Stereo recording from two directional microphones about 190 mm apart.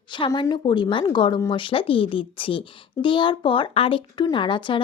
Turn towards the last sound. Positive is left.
turn(degrees=25)  # may be behind; listen again after turning